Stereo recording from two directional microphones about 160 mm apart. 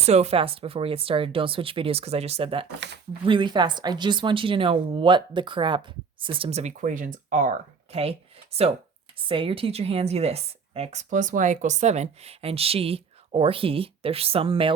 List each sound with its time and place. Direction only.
0.0 s speech: 40° right (ahead or behind)
2.8 s speech: 90° right
3.2 s speech: 30° right (ahead or behind); by 7.9 s 55° right (ahead or behind)
8.5 s speech: 40° right (ahead or behind)